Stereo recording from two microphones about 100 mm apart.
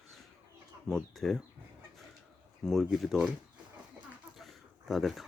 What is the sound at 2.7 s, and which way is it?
Speech, centre (ahead or behind).